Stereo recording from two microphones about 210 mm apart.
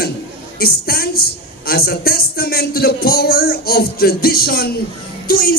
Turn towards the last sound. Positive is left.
turn(degrees=45)  # may be behind; listen again after turning